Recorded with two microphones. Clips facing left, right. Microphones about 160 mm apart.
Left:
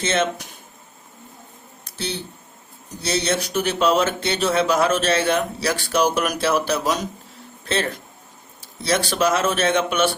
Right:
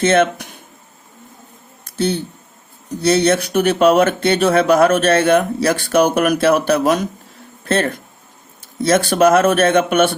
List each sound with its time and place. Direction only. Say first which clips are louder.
0.0 s speech: right 8 dB; 55° right (ahead or behind)
2.0 s a man's voice: right 10 dB; 50° right (ahead or behind)